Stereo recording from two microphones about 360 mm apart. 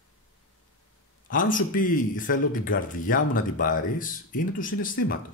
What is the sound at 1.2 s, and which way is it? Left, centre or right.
Speech, left.